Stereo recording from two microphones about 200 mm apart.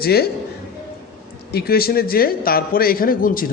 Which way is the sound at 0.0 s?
50° left (ahead or behind).